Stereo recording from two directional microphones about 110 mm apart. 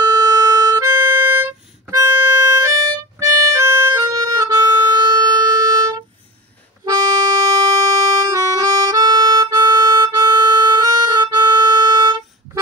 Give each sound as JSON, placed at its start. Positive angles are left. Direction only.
{"t": 0.0, "sound": "music", "side_deg": -40}
{"t": 0.8, "sound": "music", "side_deg": -20}
{"t": 6.8, "sound": "harmonica", "side_deg": -35}